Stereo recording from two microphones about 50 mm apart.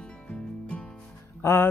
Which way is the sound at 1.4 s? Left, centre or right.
Left.